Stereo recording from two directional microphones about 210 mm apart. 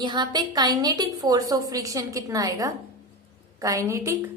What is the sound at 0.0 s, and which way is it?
A woman's voice, 20° right (ahead or behind).